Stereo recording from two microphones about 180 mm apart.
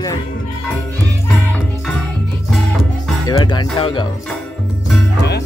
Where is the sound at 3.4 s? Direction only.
25° left (ahead or behind).